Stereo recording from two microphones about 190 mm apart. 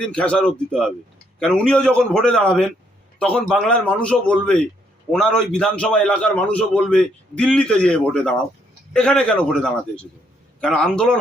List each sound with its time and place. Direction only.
0.1 s a man's voice: 5° left (ahead or behind)
10.6 s a man's voice: 5° left (ahead or behind)